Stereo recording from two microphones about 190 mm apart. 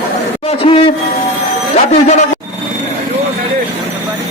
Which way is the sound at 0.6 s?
30° left (ahead or behind).